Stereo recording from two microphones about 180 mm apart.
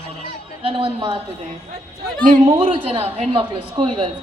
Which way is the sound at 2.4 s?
30° right (ahead or behind).